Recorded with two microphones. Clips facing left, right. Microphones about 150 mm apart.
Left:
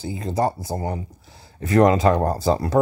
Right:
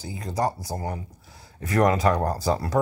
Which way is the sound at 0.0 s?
25° left (ahead or behind).